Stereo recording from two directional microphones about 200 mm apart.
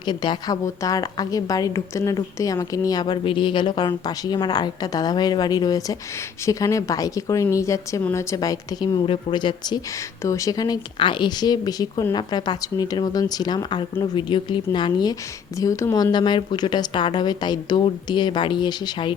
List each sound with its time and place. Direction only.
0.0 s a woman's voice: 20° left (ahead or behind)